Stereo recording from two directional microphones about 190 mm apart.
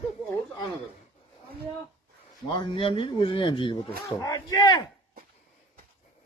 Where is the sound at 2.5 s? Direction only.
25° left (ahead or behind).